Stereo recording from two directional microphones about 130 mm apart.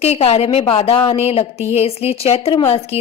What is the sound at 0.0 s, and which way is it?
A woman's voice, 50° left (ahead or behind).